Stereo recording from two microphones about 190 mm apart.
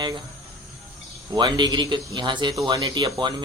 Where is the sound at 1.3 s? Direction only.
20° right (ahead or behind).